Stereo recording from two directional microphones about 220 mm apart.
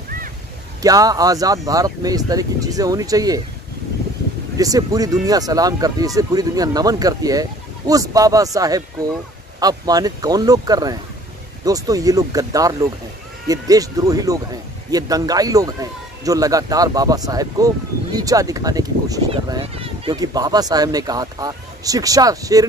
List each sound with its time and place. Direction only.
0.8 s speech: 15° right (ahead or behind)
4.6 s speech: 15° right (ahead or behind)